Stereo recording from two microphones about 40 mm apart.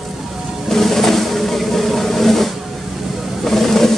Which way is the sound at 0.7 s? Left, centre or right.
Centre.